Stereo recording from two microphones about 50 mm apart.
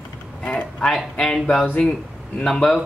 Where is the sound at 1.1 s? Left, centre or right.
Centre.